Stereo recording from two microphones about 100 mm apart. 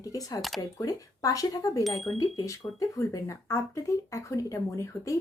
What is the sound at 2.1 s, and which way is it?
Speech, 35° left (ahead or behind).